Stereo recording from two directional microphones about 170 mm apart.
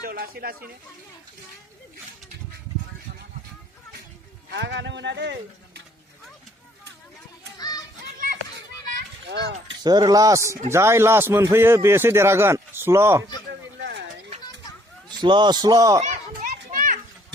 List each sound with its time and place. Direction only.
0.0 s speech: 65° right (ahead or behind)
4.5 s speech: 90° right
8.9 s children playing: 85° right
9.8 s a man's voice: 25° right (ahead or behind)
15.2 s speech: 25° right (ahead or behind)
16.0 s children playing: 55° right (ahead or behind)